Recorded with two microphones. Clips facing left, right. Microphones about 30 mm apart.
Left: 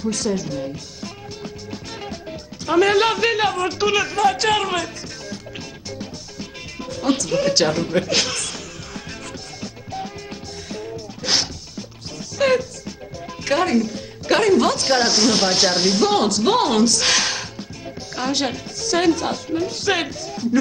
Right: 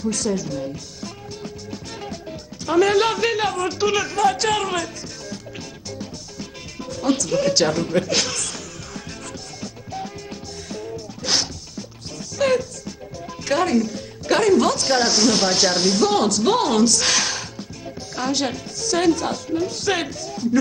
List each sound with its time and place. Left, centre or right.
0.0 s music: centre
2.6 s a woman's voice: centre
6.8 s speech: centre
9.6 s music: centre
13.3 s a woman's voice: centre